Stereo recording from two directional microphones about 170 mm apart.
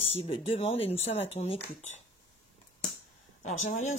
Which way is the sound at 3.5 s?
45° left (ahead or behind).